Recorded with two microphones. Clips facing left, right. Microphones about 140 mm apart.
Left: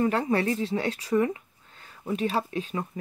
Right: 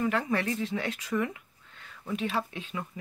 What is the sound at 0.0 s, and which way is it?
Speech, 35° left (ahead or behind).